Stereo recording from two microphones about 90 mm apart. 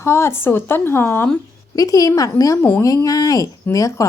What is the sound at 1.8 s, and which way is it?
A woman's voice, 40° left (ahead or behind).